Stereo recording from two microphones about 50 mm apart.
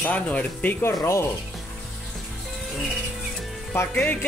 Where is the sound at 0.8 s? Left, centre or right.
Left.